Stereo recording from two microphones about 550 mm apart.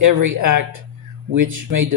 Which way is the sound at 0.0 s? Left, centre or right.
Right.